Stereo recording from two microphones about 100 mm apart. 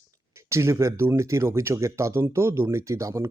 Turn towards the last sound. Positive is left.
turn(degrees=-30)  # may be behind; listen again after turning